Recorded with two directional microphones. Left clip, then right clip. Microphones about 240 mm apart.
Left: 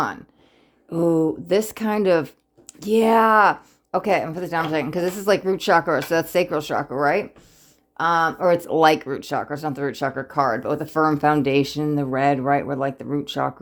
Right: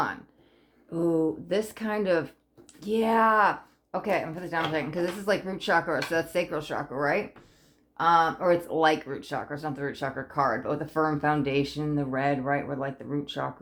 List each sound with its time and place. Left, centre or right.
0.9 s speech: left